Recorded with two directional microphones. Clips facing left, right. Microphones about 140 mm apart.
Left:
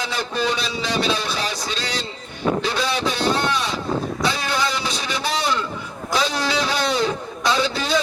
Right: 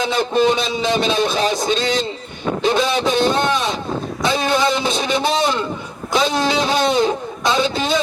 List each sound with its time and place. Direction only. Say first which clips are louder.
0.0 s a man's voice: right 8 dB; 20° right (ahead or behind)